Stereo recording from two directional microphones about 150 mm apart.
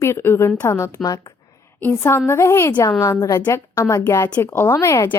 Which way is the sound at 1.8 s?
15° left (ahead or behind).